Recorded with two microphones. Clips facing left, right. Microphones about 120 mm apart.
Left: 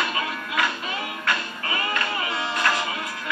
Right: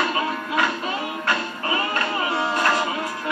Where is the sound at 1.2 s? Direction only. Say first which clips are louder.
Right 3 dB; 35° right (ahead or behind).